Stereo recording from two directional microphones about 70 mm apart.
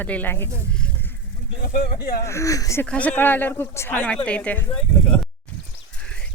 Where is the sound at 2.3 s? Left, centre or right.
Left.